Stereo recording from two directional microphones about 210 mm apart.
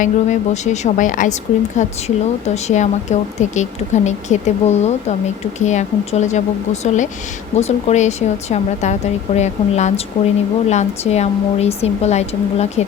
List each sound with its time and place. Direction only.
0.0 s a woman's voice: 35° left (ahead or behind)